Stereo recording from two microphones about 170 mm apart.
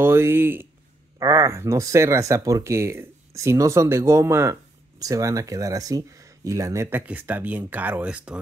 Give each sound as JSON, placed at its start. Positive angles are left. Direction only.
{"t": 0.0, "sound": "speech", "side_deg": -15}